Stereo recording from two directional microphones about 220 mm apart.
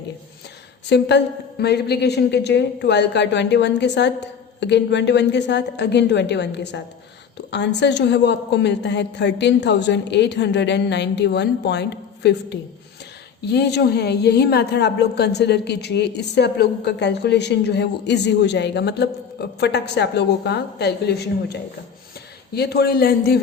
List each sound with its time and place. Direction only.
0.9 s a woman's voice: 50° left (ahead or behind)